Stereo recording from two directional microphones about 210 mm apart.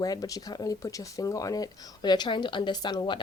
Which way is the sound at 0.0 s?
15° left (ahead or behind).